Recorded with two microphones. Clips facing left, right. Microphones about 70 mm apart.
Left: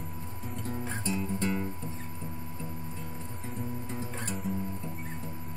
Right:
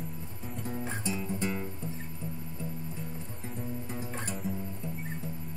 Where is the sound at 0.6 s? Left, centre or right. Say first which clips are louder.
Even; centre.